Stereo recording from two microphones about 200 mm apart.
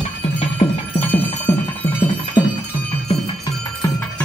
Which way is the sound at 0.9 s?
10° left (ahead or behind).